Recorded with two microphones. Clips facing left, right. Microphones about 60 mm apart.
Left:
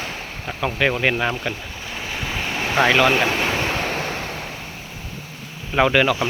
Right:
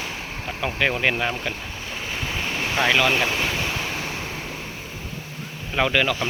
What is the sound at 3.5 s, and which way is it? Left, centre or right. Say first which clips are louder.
Waves: left 4 dB; left.